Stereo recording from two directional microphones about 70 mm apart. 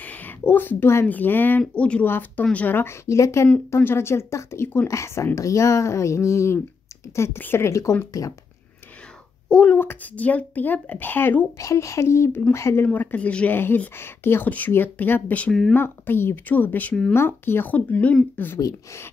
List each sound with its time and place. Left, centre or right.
0.0 s a sound: left
1.0 s a child's voice: left
2.0 s speech: left
2.9 s speech: left
7.3 s speech: left
9.5 s a child's voice: centre
11.5 s speech: left
12.8 s speech: left